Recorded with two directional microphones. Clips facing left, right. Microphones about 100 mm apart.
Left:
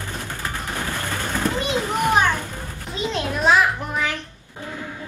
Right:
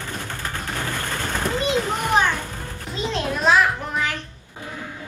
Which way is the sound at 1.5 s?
20° right (ahead or behind).